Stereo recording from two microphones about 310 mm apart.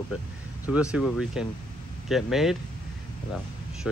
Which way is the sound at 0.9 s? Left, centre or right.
Centre.